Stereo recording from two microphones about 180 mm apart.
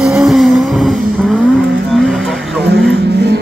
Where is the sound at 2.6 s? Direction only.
65° right (ahead or behind).